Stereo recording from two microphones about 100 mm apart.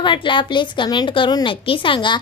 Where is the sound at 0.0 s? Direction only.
55° left (ahead or behind).